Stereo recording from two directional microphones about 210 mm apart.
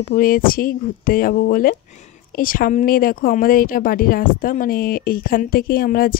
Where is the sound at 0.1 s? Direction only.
40° left (ahead or behind).